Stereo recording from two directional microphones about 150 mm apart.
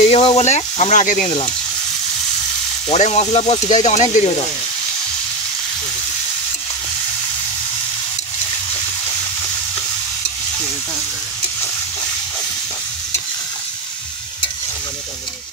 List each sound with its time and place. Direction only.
0.0 s speech: 40° left (ahead or behind); by 1.3 s 60° left (ahead or behind)
2.9 s speech: 50° left (ahead or behind)